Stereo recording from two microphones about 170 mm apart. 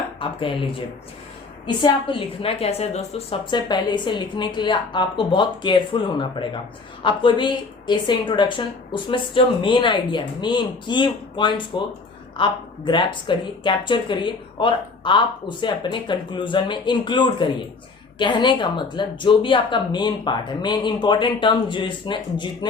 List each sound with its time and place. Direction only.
0.2 s speech: 30° left (ahead or behind)